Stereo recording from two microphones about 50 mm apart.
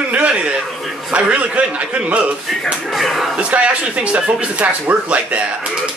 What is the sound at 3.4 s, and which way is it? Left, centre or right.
A man's voice, right.